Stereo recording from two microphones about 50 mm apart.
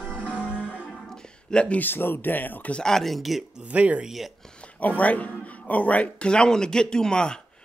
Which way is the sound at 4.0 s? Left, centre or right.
Centre.